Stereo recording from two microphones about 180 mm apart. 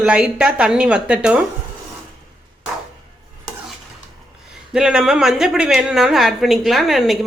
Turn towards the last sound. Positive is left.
turn(degrees=0)  # may be behind; listen again after turning